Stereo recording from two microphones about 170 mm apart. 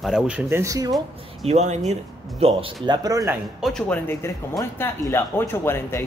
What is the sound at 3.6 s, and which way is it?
Speech, 5° left (ahead or behind).